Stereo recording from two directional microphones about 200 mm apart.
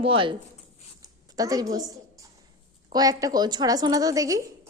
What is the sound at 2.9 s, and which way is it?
A woman's voice, 15° right (ahead or behind).